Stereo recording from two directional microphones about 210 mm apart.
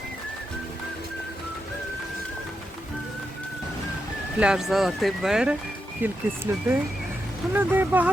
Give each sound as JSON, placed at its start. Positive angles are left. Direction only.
{"t": 4.4, "sound": "speech", "side_deg": -5}